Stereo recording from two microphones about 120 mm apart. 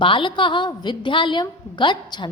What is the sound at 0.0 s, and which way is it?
A woman's voice, 45° left (ahead or behind).